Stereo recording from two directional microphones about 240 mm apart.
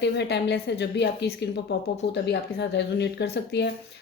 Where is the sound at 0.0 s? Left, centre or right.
Left.